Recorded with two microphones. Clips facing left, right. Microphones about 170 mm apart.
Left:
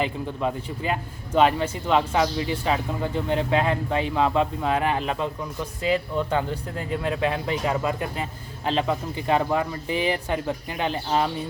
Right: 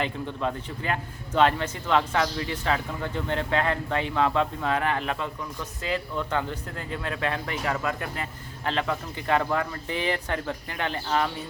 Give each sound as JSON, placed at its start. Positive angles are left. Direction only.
{"t": 0.0, "sound": "a man's voice", "side_deg": 10}